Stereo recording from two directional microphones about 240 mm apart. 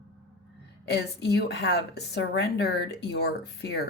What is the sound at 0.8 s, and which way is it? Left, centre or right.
Speech, left.